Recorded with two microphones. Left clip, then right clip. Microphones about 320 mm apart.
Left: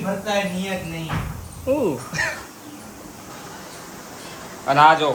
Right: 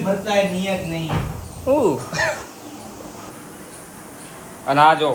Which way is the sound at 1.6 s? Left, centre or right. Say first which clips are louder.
Right 4 dB; right.